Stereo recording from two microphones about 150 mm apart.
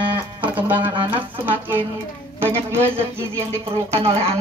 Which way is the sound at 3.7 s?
40° right (ahead or behind).